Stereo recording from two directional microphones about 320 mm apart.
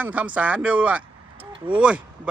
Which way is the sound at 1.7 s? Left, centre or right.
Centre.